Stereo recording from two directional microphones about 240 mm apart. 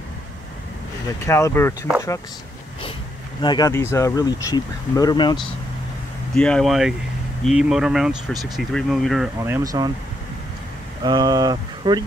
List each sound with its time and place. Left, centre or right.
1.2 s speech: centre
3.3 s speech: centre
6.3 s speech: centre
9.4 s speech: centre
11.1 s speech: centre